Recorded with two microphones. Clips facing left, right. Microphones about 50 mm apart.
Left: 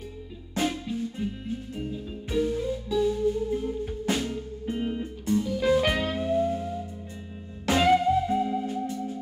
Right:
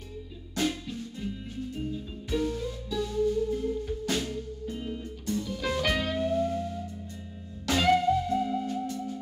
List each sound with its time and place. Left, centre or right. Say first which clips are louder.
0.6 s music: left 3 dB; left
2.3 s music: left 4 dB; centre; by 5.0 s left
5.2 s music: left 7 dB; centre